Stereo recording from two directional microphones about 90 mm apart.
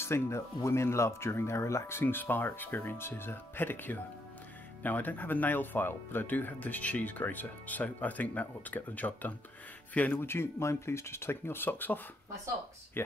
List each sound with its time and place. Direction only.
0.0 s speech: 30° left (ahead or behind)